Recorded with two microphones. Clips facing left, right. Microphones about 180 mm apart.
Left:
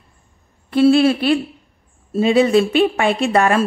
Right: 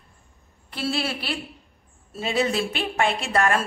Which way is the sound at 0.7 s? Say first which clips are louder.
Left 15 dB; 55° left (ahead or behind).